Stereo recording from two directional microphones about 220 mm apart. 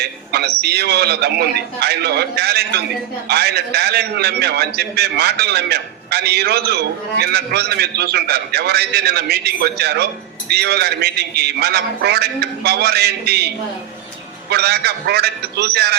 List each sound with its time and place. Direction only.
0.3 s a man's voice: 45° right (ahead or behind)
14.5 s a man's voice: 45° right (ahead or behind)